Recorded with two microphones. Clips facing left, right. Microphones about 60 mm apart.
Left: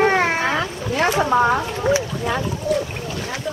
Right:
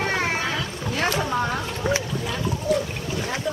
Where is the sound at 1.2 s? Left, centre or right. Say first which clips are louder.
Left 8 dB; left.